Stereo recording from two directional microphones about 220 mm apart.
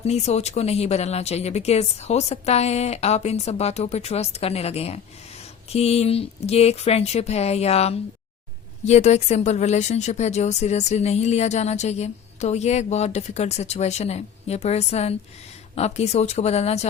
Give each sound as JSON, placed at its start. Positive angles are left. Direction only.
{"t": 0.0, "sound": "a woman's voice", "side_deg": 30}